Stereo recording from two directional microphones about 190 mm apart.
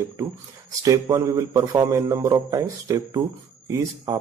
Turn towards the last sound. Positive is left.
turn(degrees=-15)  # may be behind; listen again after turning